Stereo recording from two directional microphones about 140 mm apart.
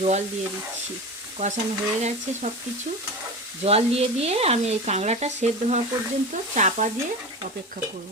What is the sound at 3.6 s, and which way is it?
Speech, 45° right (ahead or behind).